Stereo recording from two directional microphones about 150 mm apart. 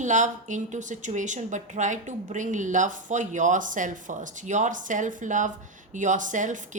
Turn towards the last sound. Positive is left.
turn(degrees=-55)  # may be behind; listen again after turning